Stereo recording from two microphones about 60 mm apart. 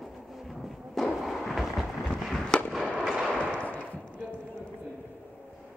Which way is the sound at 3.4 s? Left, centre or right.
Left.